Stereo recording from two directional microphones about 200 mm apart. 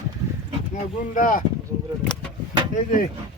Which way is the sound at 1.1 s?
40° left (ahead or behind).